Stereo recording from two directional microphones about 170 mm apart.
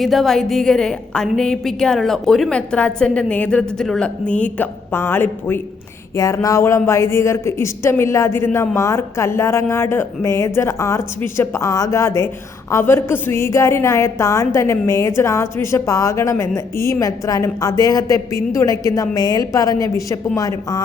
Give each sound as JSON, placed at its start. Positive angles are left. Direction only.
{"t": 0.0, "sound": "a woman's voice", "side_deg": 0}